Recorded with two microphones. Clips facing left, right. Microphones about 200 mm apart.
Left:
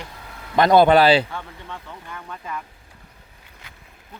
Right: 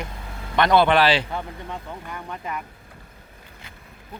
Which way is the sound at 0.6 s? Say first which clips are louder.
Left 4 dB; 40° left (ahead or behind).